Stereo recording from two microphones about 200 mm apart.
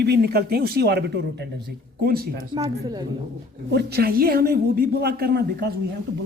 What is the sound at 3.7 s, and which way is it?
A woman's voice, 50° right (ahead or behind).